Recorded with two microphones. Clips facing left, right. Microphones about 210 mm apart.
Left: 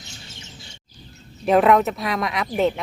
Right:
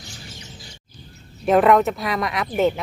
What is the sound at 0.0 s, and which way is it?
Chirp, 25° left (ahead or behind).